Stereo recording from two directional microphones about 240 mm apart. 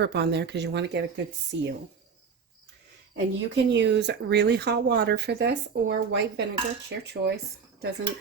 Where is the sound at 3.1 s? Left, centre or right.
Right.